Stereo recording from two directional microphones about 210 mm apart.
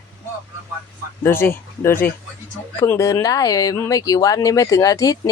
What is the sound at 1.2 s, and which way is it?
Speech, 10° left (ahead or behind).